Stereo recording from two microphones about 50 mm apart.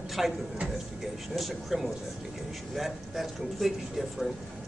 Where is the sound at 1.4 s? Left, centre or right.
Centre.